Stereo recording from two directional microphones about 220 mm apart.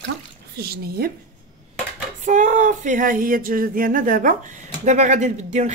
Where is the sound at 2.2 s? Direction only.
35° right (ahead or behind).